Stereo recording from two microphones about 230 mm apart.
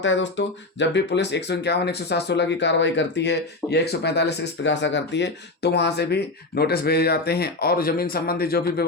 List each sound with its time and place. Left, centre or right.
0.0 s speech: left